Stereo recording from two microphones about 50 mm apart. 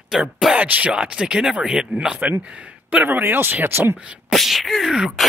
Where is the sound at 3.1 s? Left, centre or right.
Right.